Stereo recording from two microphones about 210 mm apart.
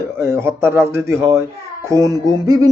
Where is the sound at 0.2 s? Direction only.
10° right (ahead or behind).